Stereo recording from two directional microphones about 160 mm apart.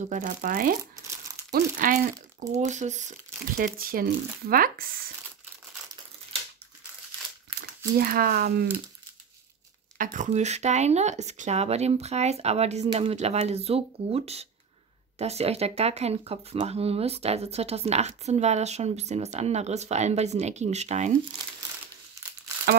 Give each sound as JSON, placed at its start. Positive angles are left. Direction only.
{"t": 0.0, "sound": "speech", "side_deg": -50}
{"t": 8.0, "sound": "speech", "side_deg": -70}
{"t": 9.9, "sound": "speech", "side_deg": -50}